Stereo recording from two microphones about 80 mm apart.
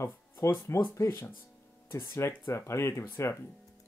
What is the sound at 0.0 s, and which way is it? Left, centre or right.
Speech, left.